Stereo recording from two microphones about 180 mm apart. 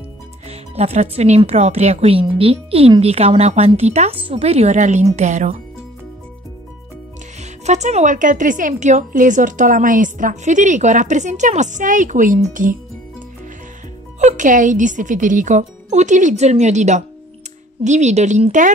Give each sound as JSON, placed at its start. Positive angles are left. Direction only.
{"t": 0.5, "sound": "speech", "side_deg": -35}
{"t": 7.6, "sound": "speech", "side_deg": -40}
{"t": 14.2, "sound": "speech", "side_deg": -45}